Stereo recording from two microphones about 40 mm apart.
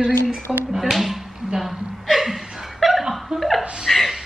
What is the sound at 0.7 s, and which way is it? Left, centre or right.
Speech, centre.